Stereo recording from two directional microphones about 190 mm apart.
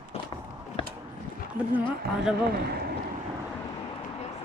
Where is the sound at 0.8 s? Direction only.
30° left (ahead or behind).